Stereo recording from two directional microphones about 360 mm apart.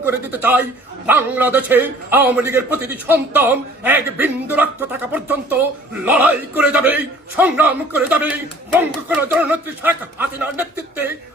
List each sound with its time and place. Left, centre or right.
0.0 s a man's voice: centre